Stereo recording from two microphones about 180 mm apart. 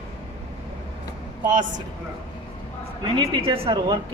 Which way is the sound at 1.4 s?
45° right (ahead or behind).